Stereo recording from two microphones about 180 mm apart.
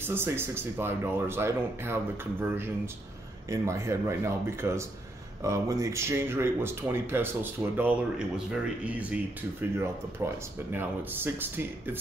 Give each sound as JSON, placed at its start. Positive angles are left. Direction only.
{"t": 0.0, "sound": "speech", "side_deg": -10}